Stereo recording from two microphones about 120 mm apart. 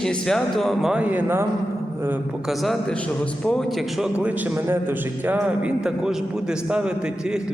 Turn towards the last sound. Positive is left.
turn(degrees=-5)  # may be behind; listen again after turning